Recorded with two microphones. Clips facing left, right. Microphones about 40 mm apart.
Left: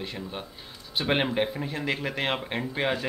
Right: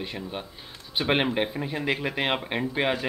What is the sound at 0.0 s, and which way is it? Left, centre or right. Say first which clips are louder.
Speech: right 2 dB; centre.